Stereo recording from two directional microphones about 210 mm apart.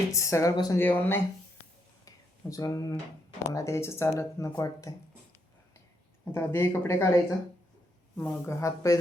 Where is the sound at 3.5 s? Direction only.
15° left (ahead or behind).